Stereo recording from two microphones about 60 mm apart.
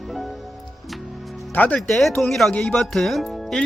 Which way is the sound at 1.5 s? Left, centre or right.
Left.